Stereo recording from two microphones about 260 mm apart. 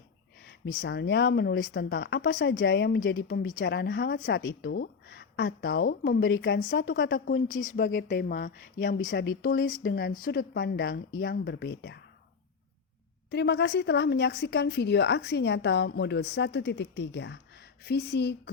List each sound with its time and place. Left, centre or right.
0.4 s speech: left
13.3 s speech: left